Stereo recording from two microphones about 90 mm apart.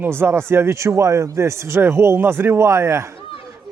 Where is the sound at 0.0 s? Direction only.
25° right (ahead or behind).